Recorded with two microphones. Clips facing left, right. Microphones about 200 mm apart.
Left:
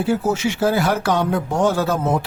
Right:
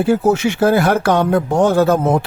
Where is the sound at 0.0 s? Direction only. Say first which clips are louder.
Right 5 dB; 55° right (ahead or behind).